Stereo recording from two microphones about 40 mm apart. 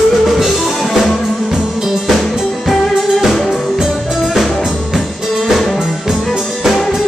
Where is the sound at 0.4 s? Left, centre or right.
Centre.